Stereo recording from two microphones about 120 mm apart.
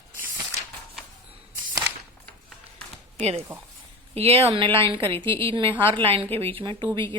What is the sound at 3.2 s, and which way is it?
Speech, 65° right (ahead or behind).